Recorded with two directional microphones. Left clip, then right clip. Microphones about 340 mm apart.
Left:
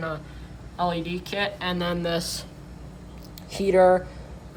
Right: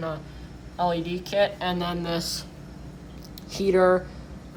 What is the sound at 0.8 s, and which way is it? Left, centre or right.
A woman's voice, centre.